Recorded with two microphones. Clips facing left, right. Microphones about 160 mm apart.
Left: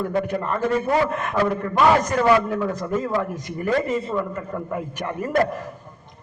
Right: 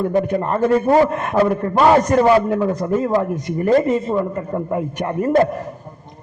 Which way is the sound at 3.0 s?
45° right (ahead or behind).